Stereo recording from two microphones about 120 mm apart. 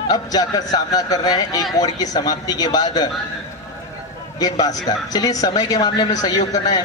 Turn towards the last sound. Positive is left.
turn(degrees=30)  # may be behind; listen again after turning